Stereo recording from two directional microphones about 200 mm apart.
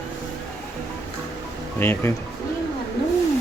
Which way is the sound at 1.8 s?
10° left (ahead or behind).